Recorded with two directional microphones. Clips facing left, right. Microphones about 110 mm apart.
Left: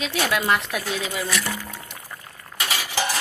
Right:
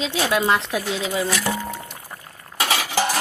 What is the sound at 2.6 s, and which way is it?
Cutlery, 90° right.